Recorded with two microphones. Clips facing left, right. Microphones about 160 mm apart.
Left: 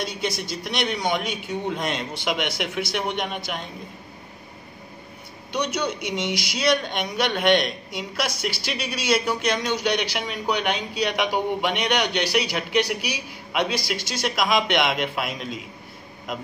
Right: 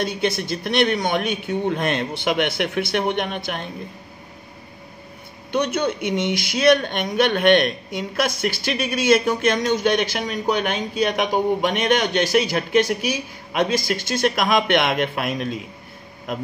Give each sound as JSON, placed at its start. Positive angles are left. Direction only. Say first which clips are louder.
{"t": 0.0, "sound": "speech", "louder": "right 5 dB", "side_deg": -55}
{"t": 5.5, "sound": "speech", "louder": "right 4 dB", "side_deg": -55}